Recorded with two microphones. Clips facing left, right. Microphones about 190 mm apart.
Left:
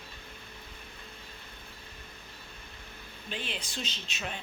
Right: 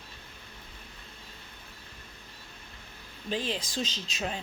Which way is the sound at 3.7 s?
35° right (ahead or behind).